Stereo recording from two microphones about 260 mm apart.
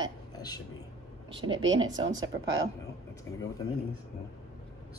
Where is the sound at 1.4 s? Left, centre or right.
Centre.